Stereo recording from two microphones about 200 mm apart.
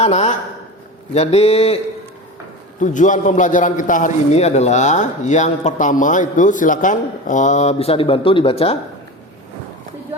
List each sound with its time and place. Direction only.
0.0 s a man's voice: 30° left (ahead or behind)
2.8 s a man's voice: 40° left (ahead or behind)